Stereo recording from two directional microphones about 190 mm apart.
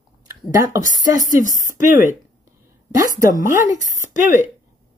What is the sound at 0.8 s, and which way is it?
Speech, 45° left (ahead or behind).